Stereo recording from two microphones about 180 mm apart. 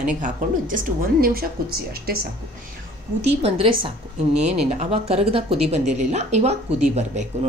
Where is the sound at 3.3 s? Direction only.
30° right (ahead or behind).